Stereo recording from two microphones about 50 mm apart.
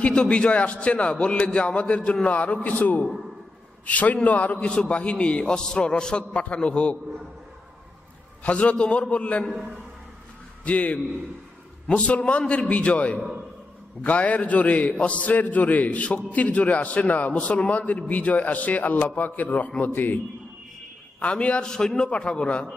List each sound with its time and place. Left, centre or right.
0.1 s a man's voice: centre
8.5 s a man's voice: left
10.6 s a man's voice: left
21.2 s a man's voice: left